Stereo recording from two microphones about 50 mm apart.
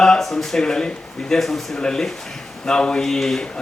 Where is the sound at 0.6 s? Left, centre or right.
Centre.